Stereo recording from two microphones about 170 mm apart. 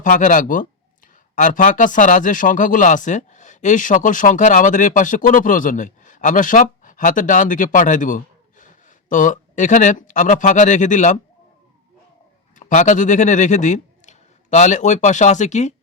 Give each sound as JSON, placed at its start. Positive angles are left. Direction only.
{"t": 0.0, "sound": "speech", "side_deg": 50}
{"t": 12.5, "sound": "speech", "side_deg": 45}